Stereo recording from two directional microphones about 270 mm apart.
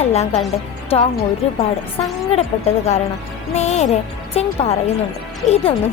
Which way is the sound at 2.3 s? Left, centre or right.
Left.